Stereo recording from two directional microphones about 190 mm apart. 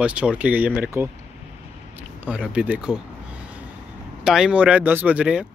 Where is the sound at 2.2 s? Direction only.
5° right (ahead or behind).